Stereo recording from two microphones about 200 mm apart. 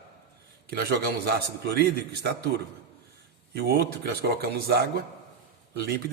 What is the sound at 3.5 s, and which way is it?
A man's voice, 55° right (ahead or behind).